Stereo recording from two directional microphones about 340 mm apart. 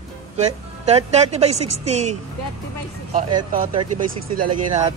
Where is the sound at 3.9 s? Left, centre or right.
Right.